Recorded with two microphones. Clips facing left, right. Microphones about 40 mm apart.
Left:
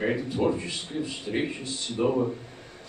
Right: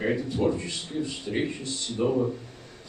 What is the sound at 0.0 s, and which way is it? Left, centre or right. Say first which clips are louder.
A man's voice: even; centre.